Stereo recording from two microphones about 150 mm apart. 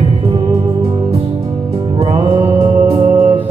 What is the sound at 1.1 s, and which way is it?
Music, 40° right (ahead or behind).